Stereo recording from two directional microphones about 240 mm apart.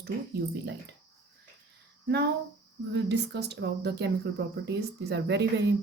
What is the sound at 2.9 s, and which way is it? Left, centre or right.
Speech, right.